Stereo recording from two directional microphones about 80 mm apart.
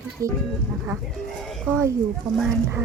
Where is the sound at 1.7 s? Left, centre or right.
Right.